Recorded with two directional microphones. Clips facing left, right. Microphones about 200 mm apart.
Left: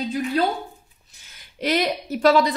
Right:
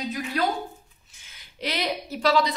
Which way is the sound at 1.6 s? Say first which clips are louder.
Left 6 dB; 45° left (ahead or behind).